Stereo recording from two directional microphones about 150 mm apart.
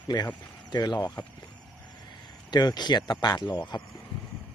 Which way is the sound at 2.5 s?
30° left (ahead or behind).